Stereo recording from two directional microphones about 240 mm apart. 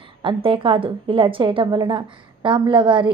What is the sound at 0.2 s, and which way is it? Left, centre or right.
A woman's voice, right.